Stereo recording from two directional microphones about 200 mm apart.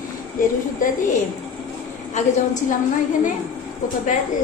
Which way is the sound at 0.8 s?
40° left (ahead or behind).